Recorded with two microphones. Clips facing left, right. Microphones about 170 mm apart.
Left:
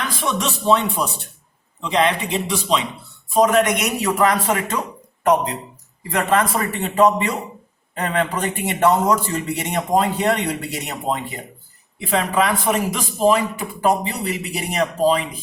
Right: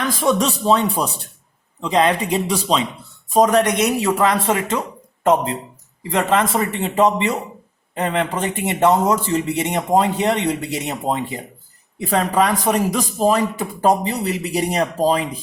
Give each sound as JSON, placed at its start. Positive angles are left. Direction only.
{"t": 0.2, "sound": "a man's voice", "side_deg": -40}
{"t": 4.0, "sound": "speech", "side_deg": -25}
{"t": 11.9, "sound": "a man's voice", "side_deg": -40}